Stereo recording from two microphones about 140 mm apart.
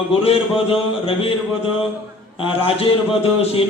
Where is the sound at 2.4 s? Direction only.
40° left (ahead or behind).